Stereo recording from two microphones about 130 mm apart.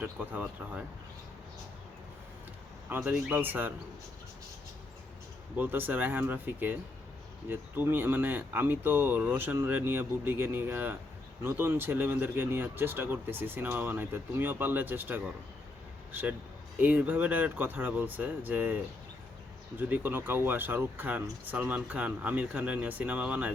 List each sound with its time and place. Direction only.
0.0 s speech: 10° right (ahead or behind)
2.9 s speech: 15° right (ahead or behind)
5.5 s speech: 15° right (ahead or behind)
16.7 s speech: 10° right (ahead or behind)